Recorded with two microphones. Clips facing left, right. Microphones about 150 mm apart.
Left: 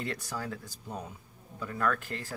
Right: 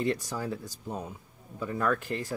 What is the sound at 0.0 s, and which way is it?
Speech, 20° right (ahead or behind).